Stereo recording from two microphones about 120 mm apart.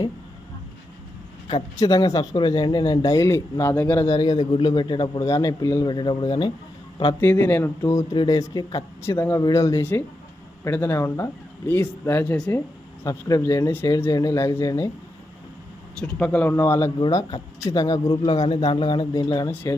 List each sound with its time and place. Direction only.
1.8 s speech: 30° left (ahead or behind); by 4.0 s 15° left (ahead or behind)
4.0 s speech: 30° left (ahead or behind)
5.2 s speech: 25° left (ahead or behind)
7.2 s speech: 15° left (ahead or behind)
7.8 s speech: 30° left (ahead or behind)
8.1 s speech: 40° left (ahead or behind)
8.4 s speech: 25° left (ahead or behind)
13.1 s speech: 30° left (ahead or behind)
16.0 s speech: 10° left (ahead or behind); by 19.5 s 35° left (ahead or behind)